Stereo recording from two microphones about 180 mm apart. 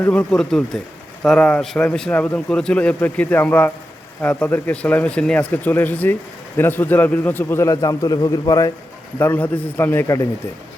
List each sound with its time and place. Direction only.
0.0 s a man's voice: 5° left (ahead or behind)